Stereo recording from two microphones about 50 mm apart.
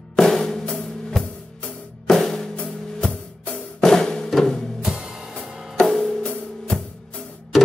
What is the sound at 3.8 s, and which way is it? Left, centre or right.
Music, centre.